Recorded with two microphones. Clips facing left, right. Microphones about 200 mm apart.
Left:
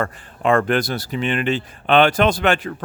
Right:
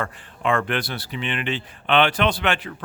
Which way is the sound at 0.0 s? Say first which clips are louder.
Left 4 dB; 45° left (ahead or behind).